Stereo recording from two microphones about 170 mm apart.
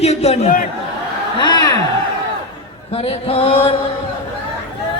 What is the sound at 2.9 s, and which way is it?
Mantra, 35° left (ahead or behind).